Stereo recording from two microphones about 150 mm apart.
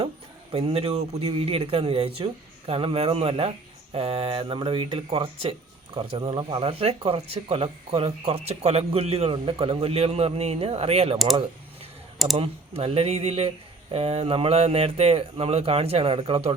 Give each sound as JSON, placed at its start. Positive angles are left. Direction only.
{"t": 0.5, "sound": "speech", "side_deg": -40}
{"t": 12.4, "sound": "speech", "side_deg": -40}